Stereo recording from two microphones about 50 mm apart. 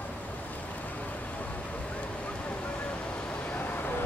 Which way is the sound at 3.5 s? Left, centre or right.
Left.